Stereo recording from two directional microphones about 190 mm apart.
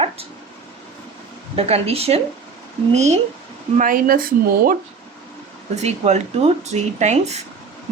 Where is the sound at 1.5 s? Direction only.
30° right (ahead or behind).